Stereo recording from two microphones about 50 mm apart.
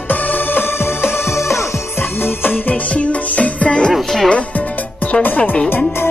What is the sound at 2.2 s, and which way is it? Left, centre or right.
Music, left.